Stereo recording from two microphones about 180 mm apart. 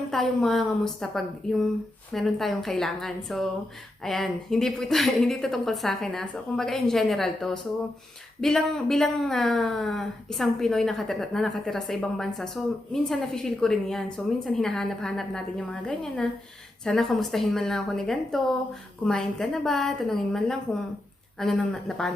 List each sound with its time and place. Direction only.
0.1 s speech: centre (ahead or behind)